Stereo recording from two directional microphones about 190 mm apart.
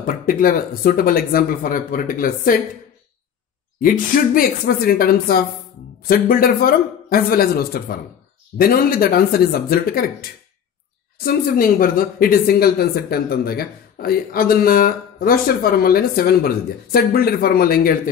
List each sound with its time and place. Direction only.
0.0 s speech: 45° left (ahead or behind)
3.8 s speech: 45° left (ahead or behind)
11.2 s speech: 50° left (ahead or behind)